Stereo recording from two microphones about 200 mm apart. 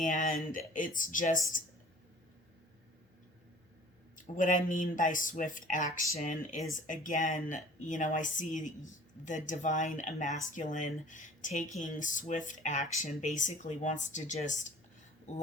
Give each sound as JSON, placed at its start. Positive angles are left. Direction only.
{"t": 0.0, "sound": "speech", "side_deg": 40}
{"t": 4.1, "sound": "speech", "side_deg": 40}